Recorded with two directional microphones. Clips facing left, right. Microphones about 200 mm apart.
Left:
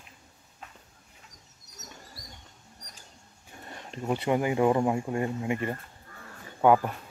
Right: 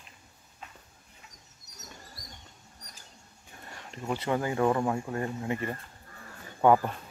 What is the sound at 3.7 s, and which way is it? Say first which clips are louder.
Speech: left 3 dB; 20° left (ahead or behind).